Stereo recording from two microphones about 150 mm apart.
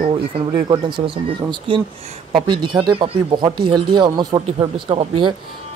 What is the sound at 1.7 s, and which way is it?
Speech, 35° right (ahead or behind).